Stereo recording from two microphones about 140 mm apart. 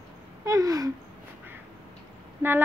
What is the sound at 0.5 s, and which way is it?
Speech, 25° right (ahead or behind).